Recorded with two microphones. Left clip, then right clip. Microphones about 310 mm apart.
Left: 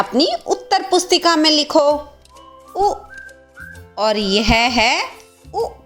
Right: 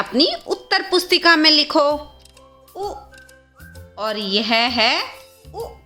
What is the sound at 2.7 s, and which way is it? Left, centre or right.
Speech, centre.